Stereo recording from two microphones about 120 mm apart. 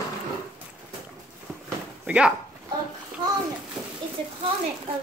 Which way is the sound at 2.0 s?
10° right (ahead or behind).